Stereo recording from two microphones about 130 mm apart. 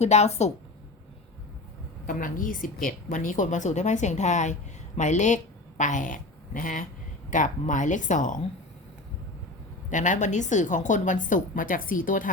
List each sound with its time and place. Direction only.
0.0 s a woman's voice: 60° left (ahead or behind)
2.0 s a woman's voice: 90° left
7.3 s a woman's voice: 80° left
9.9 s a woman's voice: 70° left (ahead or behind); by 12.3 s 90° left